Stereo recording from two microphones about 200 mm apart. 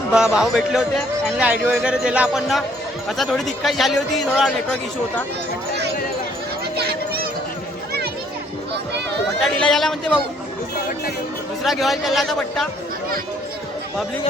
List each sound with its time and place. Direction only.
0.1 s a man's voice: 5° right (ahead or behind)
6.7 s a sound: 50° right (ahead or behind)
9.4 s a man's voice: 5° left (ahead or behind)
11.6 s a man's voice: centre (ahead or behind)